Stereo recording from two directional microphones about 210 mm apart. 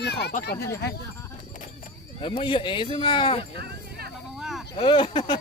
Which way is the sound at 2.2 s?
25° left (ahead or behind).